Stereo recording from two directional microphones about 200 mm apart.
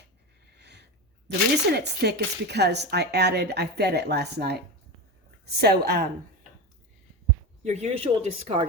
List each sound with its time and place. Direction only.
0.6 s sniff: 60° right (ahead or behind)
1.7 s a woman's voice: 55° right (ahead or behind)
7.6 s speech: 35° right (ahead or behind)